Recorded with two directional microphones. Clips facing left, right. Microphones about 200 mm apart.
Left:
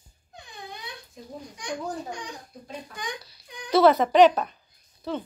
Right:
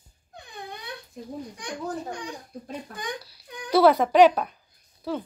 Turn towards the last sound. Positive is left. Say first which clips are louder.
# right 1 dB
turn(degrees=-10)  # may be behind; listen again after turning